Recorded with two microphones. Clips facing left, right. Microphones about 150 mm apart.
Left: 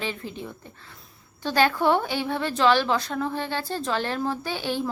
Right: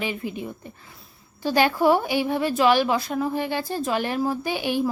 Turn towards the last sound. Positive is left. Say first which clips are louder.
# right 4 dB
turn(degrees=-15)  # may be behind; listen again after turning